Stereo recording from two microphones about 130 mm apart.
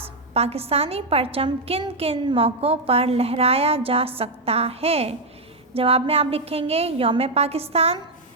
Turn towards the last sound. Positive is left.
turn(degrees=-50)  # may be behind; listen again after turning